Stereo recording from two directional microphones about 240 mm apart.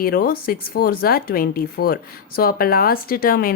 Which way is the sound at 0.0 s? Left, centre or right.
Left.